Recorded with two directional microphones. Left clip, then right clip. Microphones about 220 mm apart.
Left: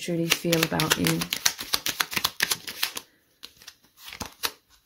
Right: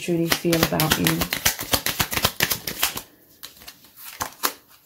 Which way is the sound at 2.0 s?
20° left (ahead or behind).